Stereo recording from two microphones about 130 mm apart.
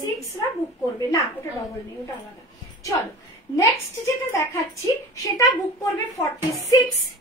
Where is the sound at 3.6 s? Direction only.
20° left (ahead or behind).